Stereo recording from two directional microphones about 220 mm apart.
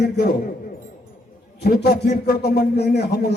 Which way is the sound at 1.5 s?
45° left (ahead or behind).